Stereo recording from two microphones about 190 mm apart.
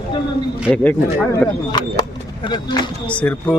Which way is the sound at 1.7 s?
20° left (ahead or behind).